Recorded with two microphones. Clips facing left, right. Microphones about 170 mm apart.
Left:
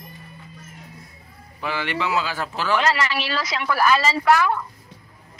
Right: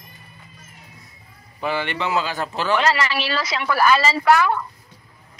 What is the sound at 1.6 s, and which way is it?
Speech, centre (ahead or behind).